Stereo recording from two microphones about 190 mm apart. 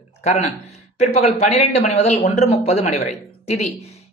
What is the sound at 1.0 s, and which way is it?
Speech, 35° left (ahead or behind).